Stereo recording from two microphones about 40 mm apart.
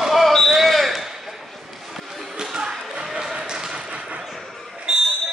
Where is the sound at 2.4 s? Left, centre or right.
Centre.